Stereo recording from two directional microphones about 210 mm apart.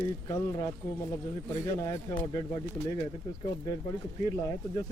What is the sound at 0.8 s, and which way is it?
Speech, 15° left (ahead or behind).